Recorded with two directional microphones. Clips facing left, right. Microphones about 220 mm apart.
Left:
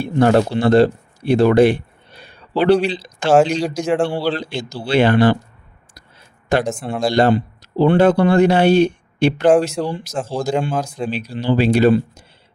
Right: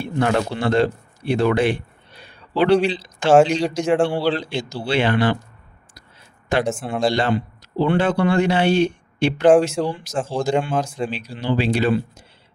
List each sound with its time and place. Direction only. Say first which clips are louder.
0.0 s speech: left 6 dB; 40° left (ahead or behind)
3.3 s speech: even; 5° left (ahead or behind)
4.4 s speech: even; 40° left (ahead or behind)
6.7 s speech: even; centre (ahead or behind)
7.1 s speech: left 6 dB; 40° left (ahead or behind)
9.6 s speech: even; 5° left (ahead or behind)
11.1 s speech: left 4 dB; 35° left (ahead or behind)